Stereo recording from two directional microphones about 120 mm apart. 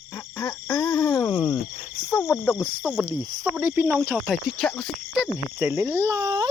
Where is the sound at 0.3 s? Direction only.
35° left (ahead or behind).